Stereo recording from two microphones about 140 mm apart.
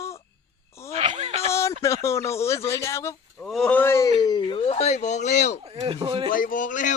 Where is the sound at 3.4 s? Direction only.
5° left (ahead or behind).